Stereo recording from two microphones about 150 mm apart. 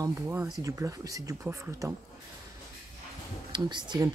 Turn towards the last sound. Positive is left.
turn(degrees=-30)  # may be behind; listen again after turning